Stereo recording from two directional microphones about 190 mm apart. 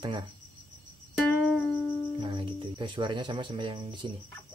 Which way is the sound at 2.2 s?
25° right (ahead or behind).